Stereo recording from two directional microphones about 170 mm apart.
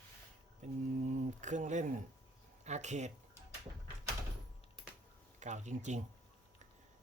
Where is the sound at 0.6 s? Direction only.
45° right (ahead or behind).